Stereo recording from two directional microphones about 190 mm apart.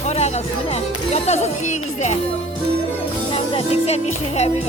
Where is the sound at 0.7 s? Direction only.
35° left (ahead or behind).